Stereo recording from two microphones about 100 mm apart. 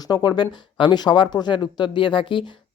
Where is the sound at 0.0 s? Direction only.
45° left (ahead or behind).